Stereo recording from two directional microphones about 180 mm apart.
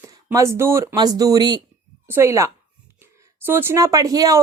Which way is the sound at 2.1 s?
15° right (ahead or behind).